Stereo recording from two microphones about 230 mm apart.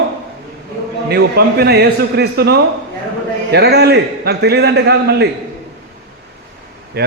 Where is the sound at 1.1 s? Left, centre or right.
Right.